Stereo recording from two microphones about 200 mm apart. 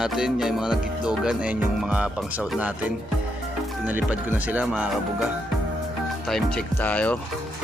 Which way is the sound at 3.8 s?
10° right (ahead or behind).